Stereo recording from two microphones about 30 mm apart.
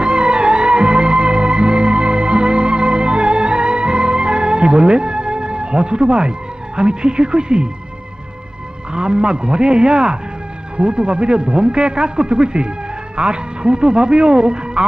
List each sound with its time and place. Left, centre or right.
0.0 s music: right
6.7 s a man's voice: right
8.9 s a man's voice: right